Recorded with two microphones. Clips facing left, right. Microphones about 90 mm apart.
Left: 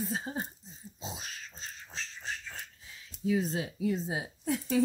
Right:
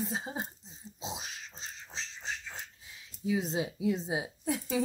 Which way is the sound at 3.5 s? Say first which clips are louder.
Right 1 dB; 15° right (ahead or behind).